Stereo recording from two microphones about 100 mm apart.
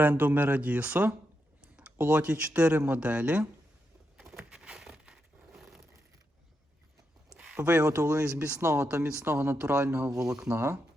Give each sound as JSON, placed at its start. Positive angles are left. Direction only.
{"t": 0.0, "sound": "speech", "side_deg": -20}
{"t": 4.2, "sound": "a sound", "side_deg": -5}
{"t": 7.3, "sound": "a sound", "side_deg": -10}
{"t": 7.5, "sound": "speech", "side_deg": -20}
{"t": 8.9, "sound": "speech", "side_deg": -15}
{"t": 9.1, "sound": "speech", "side_deg": -25}